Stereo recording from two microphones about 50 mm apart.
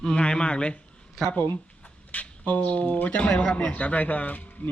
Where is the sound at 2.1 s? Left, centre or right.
Left.